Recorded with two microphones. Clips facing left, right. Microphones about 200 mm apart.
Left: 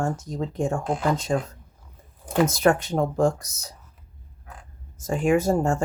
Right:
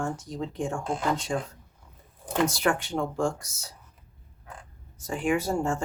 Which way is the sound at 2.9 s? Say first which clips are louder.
Left 6 dB; 40° left (ahead or behind).